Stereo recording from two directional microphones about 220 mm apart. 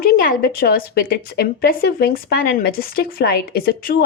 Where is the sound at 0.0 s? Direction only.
40° left (ahead or behind).